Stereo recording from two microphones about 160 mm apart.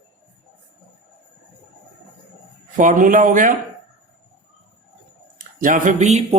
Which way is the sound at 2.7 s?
55° right (ahead or behind).